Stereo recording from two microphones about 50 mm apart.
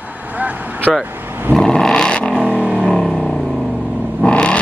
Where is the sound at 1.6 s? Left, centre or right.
Centre.